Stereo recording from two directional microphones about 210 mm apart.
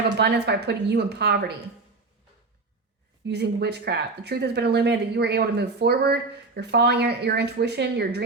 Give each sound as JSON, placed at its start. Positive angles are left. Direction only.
{"t": 0.2, "sound": "speech", "side_deg": -55}
{"t": 3.2, "sound": "speech", "side_deg": -50}